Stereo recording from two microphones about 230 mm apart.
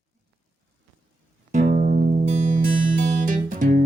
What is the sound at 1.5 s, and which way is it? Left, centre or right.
Music, right.